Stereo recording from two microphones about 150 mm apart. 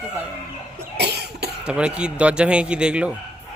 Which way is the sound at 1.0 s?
90° right.